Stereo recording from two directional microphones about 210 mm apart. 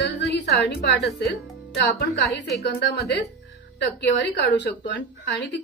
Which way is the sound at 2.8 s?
55° left (ahead or behind).